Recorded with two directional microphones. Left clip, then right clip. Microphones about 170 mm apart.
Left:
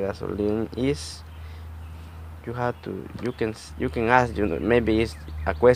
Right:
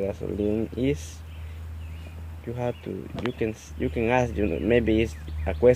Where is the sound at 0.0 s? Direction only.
Centre (ahead or behind).